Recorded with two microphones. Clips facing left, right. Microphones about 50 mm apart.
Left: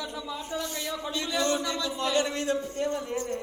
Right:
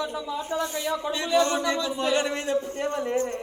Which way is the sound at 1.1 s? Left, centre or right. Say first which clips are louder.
Right 5 dB; right.